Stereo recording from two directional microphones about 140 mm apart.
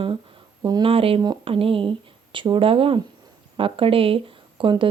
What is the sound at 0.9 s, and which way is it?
Speech, 40° right (ahead or behind).